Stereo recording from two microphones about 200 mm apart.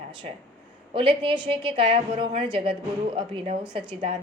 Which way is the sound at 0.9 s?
25° right (ahead or behind).